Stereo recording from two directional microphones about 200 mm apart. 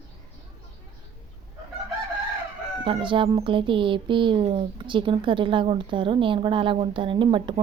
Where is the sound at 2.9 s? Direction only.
25° right (ahead or behind).